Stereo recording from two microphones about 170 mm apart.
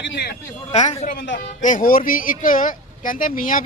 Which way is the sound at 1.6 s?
50° left (ahead or behind).